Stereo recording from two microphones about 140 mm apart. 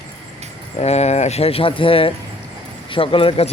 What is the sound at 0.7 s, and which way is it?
Speech, 50° left (ahead or behind).